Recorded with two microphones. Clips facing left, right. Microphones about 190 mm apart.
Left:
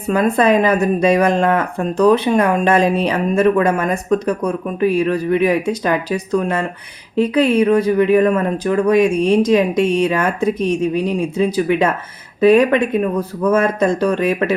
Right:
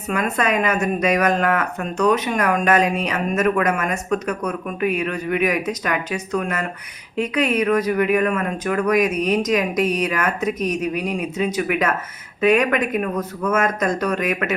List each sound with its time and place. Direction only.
0.1 s speech: 30° left (ahead or behind)